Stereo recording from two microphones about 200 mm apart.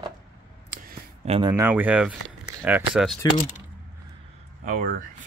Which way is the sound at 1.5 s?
10° right (ahead or behind).